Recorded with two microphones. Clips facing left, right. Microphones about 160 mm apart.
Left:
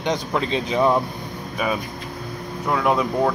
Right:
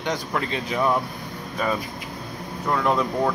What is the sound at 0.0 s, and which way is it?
Speech, 20° left (ahead or behind).